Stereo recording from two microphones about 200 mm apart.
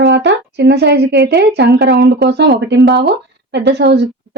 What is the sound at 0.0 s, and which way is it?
Speech, 65° right (ahead or behind).